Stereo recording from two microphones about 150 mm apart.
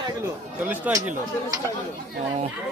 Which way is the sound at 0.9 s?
10° right (ahead or behind).